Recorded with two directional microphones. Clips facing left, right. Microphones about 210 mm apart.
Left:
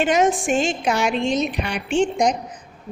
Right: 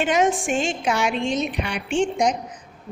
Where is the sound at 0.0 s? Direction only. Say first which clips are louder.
Left 2 dB; 40° left (ahead or behind).